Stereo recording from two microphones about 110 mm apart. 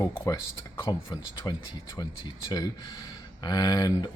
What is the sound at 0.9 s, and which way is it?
Speech, 45° left (ahead or behind).